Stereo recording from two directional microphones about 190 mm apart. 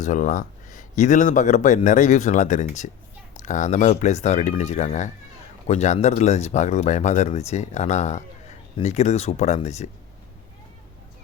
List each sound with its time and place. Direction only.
0.0 s speech: 40° left (ahead or behind)